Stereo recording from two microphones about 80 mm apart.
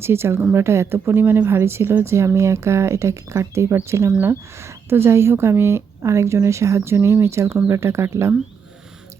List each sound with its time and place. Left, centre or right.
0.0 s speech: right